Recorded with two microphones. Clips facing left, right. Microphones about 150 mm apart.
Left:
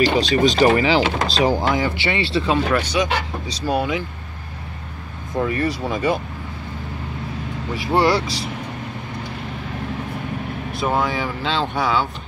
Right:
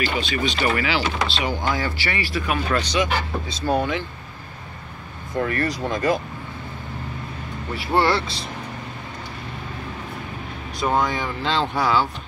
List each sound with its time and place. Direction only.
0.1 s speech: 40° left (ahead or behind)
1.7 s speech: 20° left (ahead or behind)
2.7 s speech: 10° left (ahead or behind)
3.1 s speech: 85° left
3.7 s speech: 15° left (ahead or behind)
5.5 s speech: 10° left (ahead or behind)
7.7 s speech: 15° left (ahead or behind)
10.7 s speech: 5° left (ahead or behind)